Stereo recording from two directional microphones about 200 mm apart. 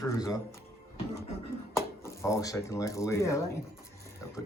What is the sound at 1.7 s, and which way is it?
Speech, 15° left (ahead or behind).